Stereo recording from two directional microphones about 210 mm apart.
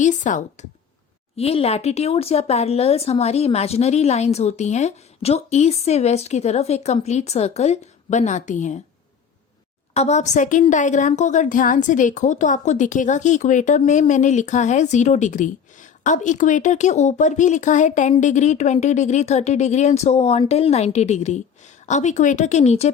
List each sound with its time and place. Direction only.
0.0 s a woman's voice: 35° left (ahead or behind)
9.9 s a woman's voice: 30° left (ahead or behind)